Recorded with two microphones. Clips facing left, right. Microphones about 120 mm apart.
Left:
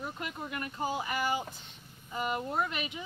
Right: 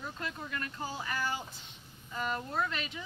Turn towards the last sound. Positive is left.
turn(degrees=15)  # may be behind; listen again after turning